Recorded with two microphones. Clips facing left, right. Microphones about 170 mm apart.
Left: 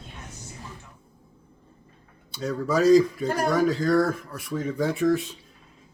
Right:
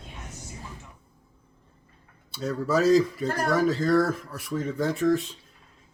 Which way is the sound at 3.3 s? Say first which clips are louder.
Left 2 dB; 10° left (ahead or behind).